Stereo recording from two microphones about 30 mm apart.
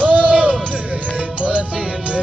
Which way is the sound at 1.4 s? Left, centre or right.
Right.